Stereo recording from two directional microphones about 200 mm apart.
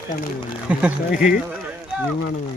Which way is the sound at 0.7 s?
5° right (ahead or behind).